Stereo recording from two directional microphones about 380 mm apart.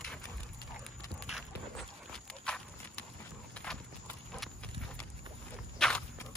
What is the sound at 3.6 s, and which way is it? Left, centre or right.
Clip-clop, centre.